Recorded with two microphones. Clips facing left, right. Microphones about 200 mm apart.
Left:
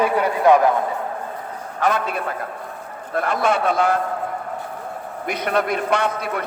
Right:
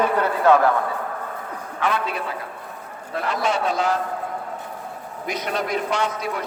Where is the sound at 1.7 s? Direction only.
45° left (ahead or behind).